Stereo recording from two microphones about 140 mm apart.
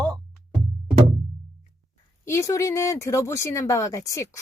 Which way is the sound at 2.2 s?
20° left (ahead or behind).